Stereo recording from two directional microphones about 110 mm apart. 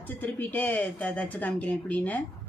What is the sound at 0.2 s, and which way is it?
Speech, 15° left (ahead or behind).